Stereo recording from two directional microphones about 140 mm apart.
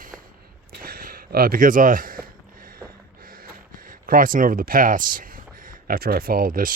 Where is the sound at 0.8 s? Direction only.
90° right.